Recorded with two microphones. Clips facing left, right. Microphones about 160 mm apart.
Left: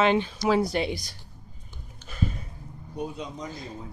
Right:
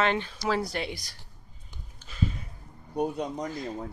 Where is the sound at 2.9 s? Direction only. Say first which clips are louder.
Right 5 dB; 55° right (ahead or behind).